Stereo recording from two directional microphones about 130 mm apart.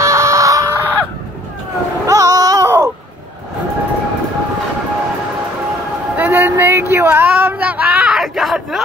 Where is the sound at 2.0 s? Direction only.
25° right (ahead or behind).